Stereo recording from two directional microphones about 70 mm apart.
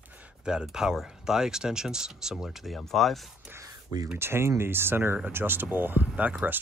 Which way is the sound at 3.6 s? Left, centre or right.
Right.